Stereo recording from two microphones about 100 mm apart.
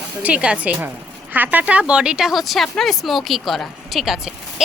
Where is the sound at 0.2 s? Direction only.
15° right (ahead or behind).